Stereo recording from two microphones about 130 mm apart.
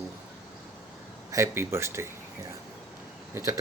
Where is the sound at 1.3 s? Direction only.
20° right (ahead or behind).